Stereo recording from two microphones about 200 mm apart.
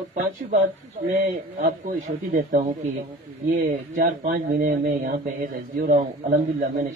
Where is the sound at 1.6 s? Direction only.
45° right (ahead or behind).